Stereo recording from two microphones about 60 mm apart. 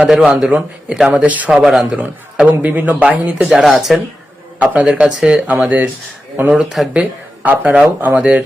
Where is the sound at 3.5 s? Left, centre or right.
Centre.